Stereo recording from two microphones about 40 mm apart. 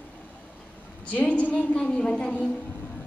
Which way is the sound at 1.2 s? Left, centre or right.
Left.